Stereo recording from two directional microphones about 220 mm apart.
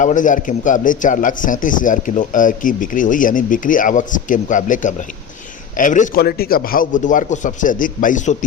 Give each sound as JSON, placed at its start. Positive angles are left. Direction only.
{"t": 0.0, "sound": "speech", "side_deg": 35}